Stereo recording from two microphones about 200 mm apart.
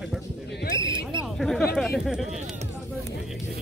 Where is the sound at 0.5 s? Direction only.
55° left (ahead or behind).